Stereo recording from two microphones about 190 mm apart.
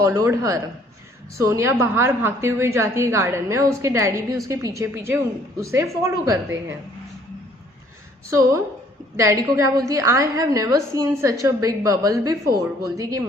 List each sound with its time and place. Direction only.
0.0 s a woman's voice: 15° right (ahead or behind)
8.3 s a woman's voice: 15° right (ahead or behind)